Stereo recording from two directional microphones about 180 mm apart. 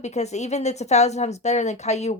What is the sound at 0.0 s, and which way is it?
Speech, 40° left (ahead or behind).